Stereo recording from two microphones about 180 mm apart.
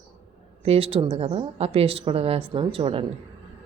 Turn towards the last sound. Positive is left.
turn(degrees=-30)  # may be behind; listen again after turning